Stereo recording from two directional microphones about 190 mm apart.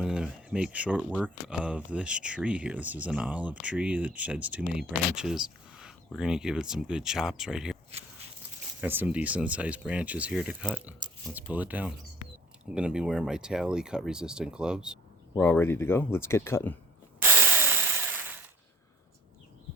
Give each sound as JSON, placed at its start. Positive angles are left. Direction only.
{"t": 0.0, "sound": "speech", "side_deg": -5}
{"t": 8.8, "sound": "speech", "side_deg": -10}
{"t": 11.0, "sound": "a sound", "side_deg": -25}
{"t": 11.3, "sound": "speech", "side_deg": -10}
{"t": 15.4, "sound": "speech", "side_deg": 10}
{"t": 17.2, "sound": "power tool", "side_deg": -10}